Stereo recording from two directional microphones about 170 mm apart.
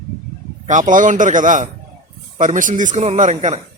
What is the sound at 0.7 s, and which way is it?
A man's voice, 50° right (ahead or behind).